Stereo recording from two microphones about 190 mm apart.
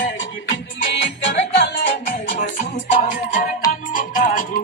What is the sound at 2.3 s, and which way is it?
Music, 45° left (ahead or behind).